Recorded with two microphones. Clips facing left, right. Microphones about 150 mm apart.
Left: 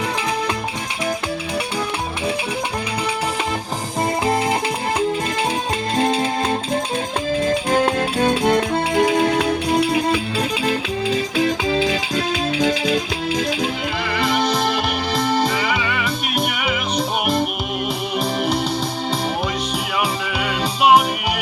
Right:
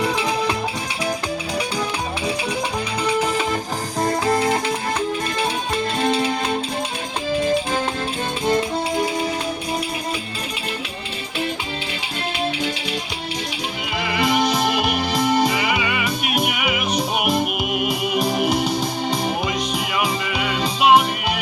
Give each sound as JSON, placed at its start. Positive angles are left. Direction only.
{"t": 4.3, "sound": "music", "side_deg": 25}
{"t": 8.2, "sound": "music", "side_deg": 60}
{"t": 14.2, "sound": "music", "side_deg": -5}
{"t": 20.4, "sound": "music", "side_deg": 5}